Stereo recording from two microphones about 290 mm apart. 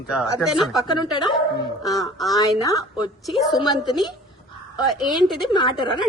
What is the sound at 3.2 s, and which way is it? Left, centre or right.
Speech, centre.